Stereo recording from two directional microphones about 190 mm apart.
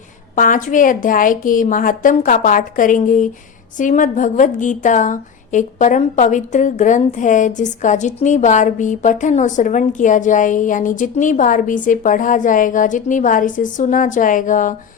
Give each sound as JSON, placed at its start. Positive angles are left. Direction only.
{"t": 0.3, "sound": "a woman's voice", "side_deg": 45}